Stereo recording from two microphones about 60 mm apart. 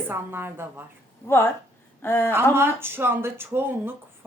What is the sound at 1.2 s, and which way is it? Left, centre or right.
A woman's voice, left.